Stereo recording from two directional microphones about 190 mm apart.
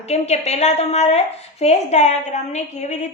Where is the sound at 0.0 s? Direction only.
35° left (ahead or behind).